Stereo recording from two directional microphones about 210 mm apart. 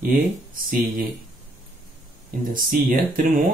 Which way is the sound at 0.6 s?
40° right (ahead or behind).